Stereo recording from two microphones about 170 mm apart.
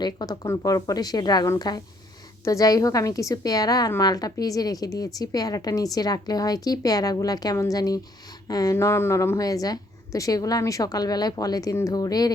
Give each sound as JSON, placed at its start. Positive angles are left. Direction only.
{"t": 0.0, "sound": "a woman's voice", "side_deg": 25}